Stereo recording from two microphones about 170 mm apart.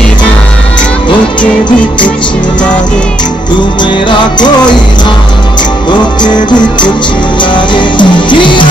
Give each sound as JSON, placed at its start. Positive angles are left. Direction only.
{"t": 5.9, "sound": "music", "side_deg": 25}